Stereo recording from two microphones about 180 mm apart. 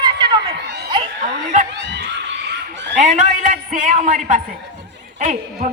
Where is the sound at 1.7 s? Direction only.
75° right (ahead or behind).